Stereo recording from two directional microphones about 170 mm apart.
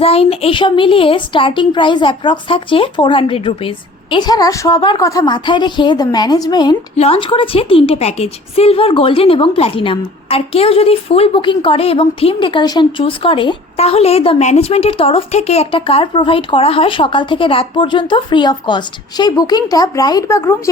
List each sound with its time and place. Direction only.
0.0 s a woman's voice: 35° left (ahead or behind)
6.9 s a woman's voice: 35° left (ahead or behind); by 20.6 s 15° left (ahead or behind)